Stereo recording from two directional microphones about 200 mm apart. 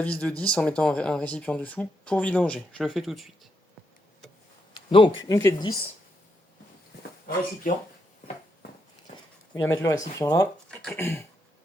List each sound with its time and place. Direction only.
0.0 s speech: 5° left (ahead or behind)
4.9 s speech: 25° left (ahead or behind)
7.6 s speech: 45° left (ahead or behind)
9.6 s speech: 15° left (ahead or behind)